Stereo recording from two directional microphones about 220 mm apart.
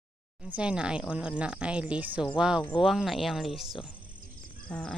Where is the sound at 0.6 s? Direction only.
5° right (ahead or behind).